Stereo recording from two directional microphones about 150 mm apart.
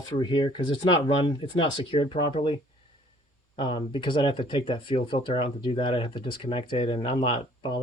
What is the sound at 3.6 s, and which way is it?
Speech, 30° left (ahead or behind).